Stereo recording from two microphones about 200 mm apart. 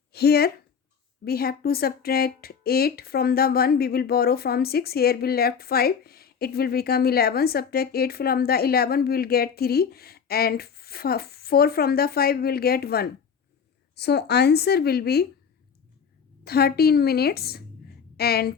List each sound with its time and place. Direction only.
0.1 s speech: 50° left (ahead or behind)
16.4 s speech: 50° left (ahead or behind)